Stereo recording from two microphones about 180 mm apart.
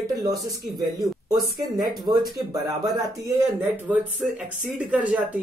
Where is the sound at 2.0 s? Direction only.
25° right (ahead or behind).